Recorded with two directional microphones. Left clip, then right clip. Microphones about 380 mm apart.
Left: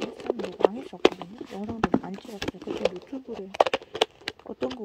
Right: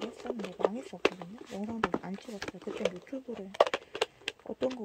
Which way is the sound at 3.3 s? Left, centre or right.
Left.